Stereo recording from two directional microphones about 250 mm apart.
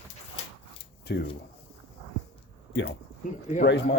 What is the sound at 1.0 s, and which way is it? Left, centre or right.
Speech, left.